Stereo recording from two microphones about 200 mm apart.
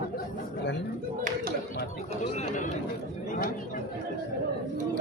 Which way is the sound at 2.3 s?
35° left (ahead or behind).